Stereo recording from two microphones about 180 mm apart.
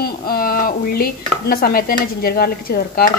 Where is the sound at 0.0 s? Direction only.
55° left (ahead or behind).